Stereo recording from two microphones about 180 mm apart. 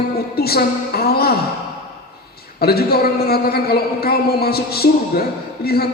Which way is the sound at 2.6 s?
60° left (ahead or behind).